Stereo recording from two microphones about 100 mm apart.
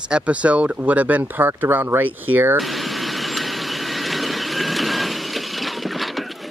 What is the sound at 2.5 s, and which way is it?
Vehicle, centre (ahead or behind).